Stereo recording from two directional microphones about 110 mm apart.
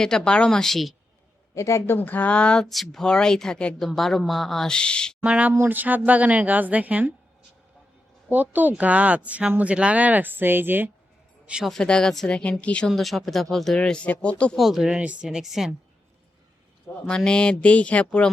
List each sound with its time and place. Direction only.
0.0 s speech: 5° left (ahead or behind)
1.5 s speech: 25° left (ahead or behind)
2.0 s speech: 15° left (ahead or behind)
5.2 s speech: 10° right (ahead or behind)
8.3 s speech: 15° right (ahead or behind)
11.4 s speech: 5° right (ahead or behind)
14.6 s speech: 5° right (ahead or behind)
17.1 s speech: 5° left (ahead or behind)